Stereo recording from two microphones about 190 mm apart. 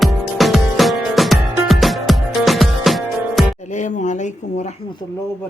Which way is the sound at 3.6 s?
40° left (ahead or behind).